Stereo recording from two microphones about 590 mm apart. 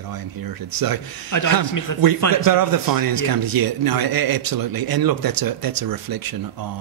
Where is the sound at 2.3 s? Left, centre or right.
Right.